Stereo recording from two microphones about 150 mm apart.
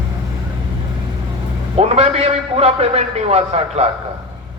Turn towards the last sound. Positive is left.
turn(degrees=-45)  # may be behind; listen again after turning